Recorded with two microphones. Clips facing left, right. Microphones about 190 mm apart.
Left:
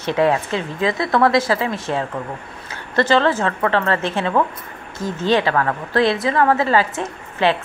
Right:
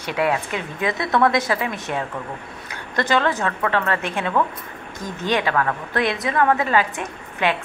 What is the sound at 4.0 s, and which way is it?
A woman's voice, 15° right (ahead or behind).